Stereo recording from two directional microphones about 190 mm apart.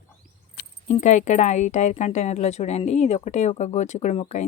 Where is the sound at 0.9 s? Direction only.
40° left (ahead or behind).